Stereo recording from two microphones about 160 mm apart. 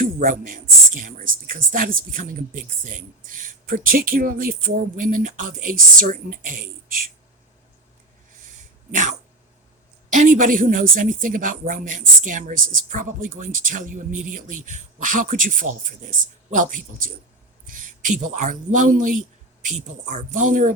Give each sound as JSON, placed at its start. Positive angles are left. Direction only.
{"t": 0.0, "sound": "speech", "side_deg": -60}
{"t": 10.1, "sound": "speech", "side_deg": -55}